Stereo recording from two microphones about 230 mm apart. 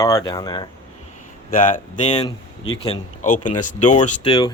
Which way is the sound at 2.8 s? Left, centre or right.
Left.